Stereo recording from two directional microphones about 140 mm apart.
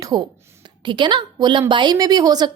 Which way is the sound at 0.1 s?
30° right (ahead or behind).